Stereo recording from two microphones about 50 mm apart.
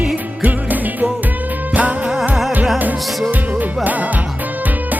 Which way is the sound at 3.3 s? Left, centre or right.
Right.